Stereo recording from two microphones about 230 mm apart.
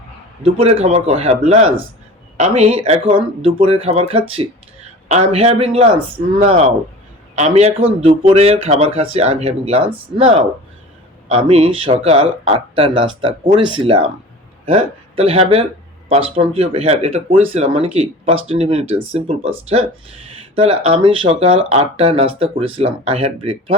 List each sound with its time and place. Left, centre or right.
0.6 s speech: right
7.3 s speech: right